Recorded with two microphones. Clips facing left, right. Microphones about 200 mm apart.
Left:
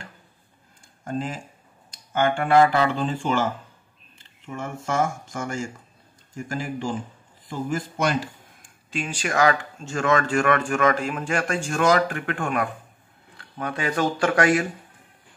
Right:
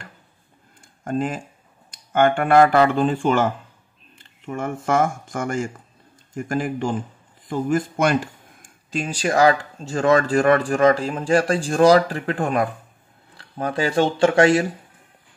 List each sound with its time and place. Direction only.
1.0 s speech: 50° right (ahead or behind)
4.5 s speech: 55° right (ahead or behind)
8.6 s speech: 40° right (ahead or behind)